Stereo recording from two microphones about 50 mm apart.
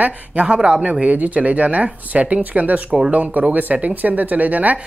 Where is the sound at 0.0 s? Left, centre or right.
Right.